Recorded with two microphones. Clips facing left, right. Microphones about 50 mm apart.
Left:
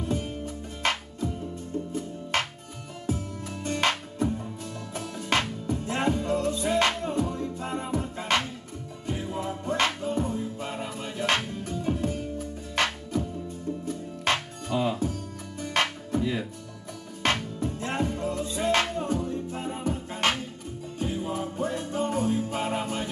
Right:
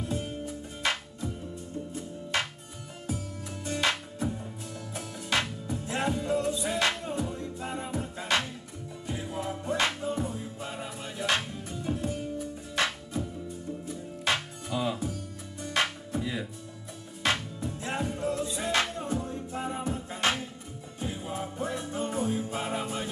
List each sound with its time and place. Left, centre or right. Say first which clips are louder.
0.0 s music: left 3 dB; left
3.6 s music: left 3 dB; left